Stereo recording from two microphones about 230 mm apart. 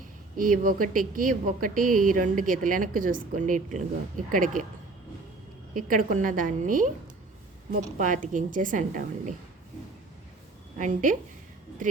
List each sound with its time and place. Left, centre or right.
0.3 s a woman's voice: right
5.7 s a woman's voice: right
7.9 s a woman's voice: right
10.8 s a woman's voice: right